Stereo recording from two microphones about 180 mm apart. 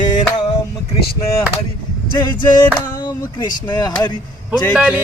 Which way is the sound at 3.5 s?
25° left (ahead or behind).